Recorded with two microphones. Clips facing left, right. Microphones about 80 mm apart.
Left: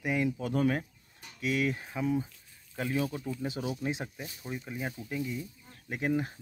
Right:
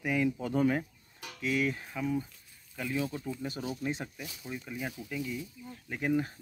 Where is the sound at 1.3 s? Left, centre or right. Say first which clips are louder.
Left 1 dB; centre.